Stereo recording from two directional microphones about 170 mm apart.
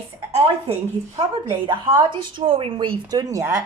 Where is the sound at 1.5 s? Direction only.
25° right (ahead or behind).